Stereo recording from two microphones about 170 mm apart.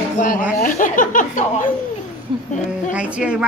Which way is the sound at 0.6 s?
50° left (ahead or behind).